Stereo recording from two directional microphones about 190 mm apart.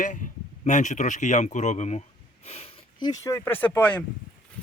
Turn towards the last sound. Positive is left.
turn(degrees=10)  # may be behind; listen again after turning